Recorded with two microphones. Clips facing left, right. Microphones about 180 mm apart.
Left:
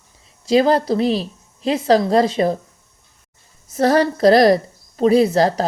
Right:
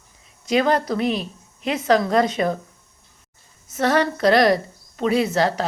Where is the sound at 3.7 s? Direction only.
35° left (ahead or behind).